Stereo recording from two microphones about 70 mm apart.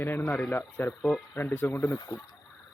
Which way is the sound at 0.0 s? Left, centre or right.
Left.